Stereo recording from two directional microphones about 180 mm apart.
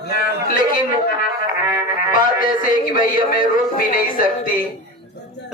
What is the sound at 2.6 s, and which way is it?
A man's voice, 50° left (ahead or behind).